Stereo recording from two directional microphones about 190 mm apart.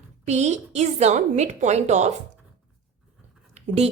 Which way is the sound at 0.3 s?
35° right (ahead or behind).